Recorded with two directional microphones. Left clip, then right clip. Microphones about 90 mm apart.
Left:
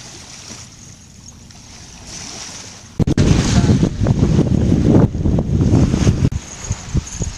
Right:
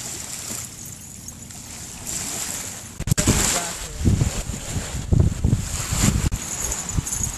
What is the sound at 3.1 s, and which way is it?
Boat, centre (ahead or behind).